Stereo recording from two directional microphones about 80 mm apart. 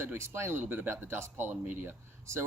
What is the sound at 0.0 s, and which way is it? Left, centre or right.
Speech, right.